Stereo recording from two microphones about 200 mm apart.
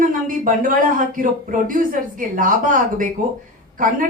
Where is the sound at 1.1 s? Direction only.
45° right (ahead or behind).